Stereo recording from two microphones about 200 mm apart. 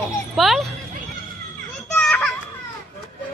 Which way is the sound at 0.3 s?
Centre (ahead or behind).